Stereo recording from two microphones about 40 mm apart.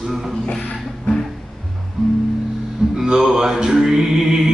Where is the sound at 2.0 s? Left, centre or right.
Centre.